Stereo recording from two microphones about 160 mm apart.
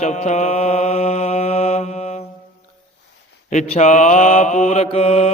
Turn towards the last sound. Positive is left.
turn(degrees=40)  # may be behind; listen again after turning